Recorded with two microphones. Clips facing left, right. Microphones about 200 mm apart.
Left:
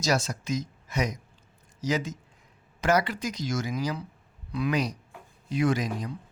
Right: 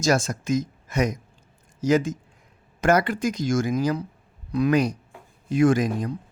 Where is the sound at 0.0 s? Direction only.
50° right (ahead or behind).